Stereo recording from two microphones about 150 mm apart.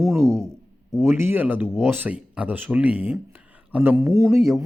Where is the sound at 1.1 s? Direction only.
15° right (ahead or behind).